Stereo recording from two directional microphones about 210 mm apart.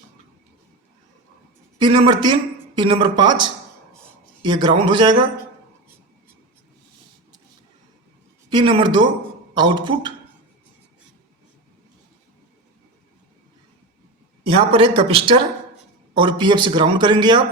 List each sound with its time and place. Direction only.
1.8 s speech: 20° right (ahead or behind)
8.4 s speech: 20° right (ahead or behind)
14.4 s speech: 25° right (ahead or behind)